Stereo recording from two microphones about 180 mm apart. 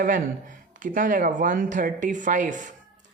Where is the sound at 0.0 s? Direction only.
45° right (ahead or behind).